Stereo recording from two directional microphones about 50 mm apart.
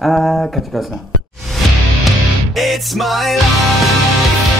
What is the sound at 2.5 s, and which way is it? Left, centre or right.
Speech, centre.